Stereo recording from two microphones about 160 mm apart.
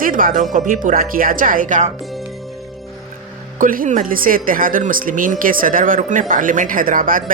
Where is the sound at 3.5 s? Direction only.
60° right (ahead or behind).